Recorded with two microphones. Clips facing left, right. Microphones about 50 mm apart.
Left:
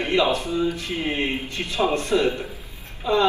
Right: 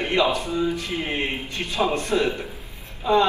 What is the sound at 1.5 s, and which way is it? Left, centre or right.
A man's voice, right.